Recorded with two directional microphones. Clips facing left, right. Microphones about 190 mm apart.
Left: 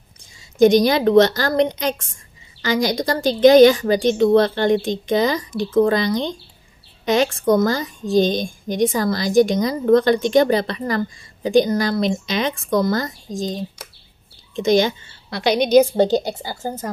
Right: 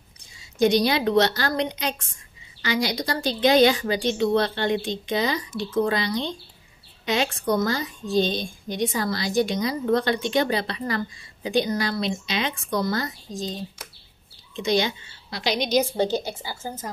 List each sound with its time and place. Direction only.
0.6 s speech: 45° left (ahead or behind)
7.5 s speech: 45° left (ahead or behind)
14.5 s speech: 50° left (ahead or behind)